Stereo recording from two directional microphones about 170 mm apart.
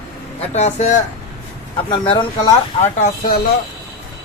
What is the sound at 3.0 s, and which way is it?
Speech, 50° left (ahead or behind).